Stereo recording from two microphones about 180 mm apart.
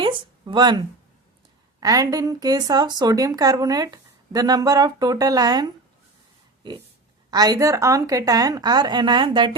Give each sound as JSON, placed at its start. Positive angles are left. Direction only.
{"t": 0.0, "sound": "speech", "side_deg": -25}
{"t": 1.8, "sound": "a woman's voice", "side_deg": -20}
{"t": 7.3, "sound": "a woman's voice", "side_deg": -20}